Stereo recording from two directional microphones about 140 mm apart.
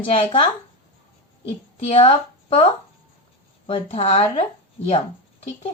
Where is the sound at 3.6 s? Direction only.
45° left (ahead or behind).